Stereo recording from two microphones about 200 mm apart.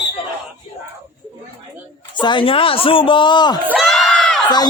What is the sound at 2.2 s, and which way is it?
Speech, 25° left (ahead or behind).